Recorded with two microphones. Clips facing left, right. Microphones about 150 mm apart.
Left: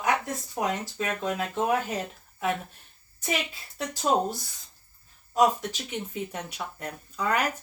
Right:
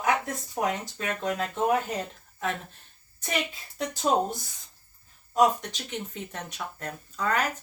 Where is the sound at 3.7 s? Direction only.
Centre (ahead or behind).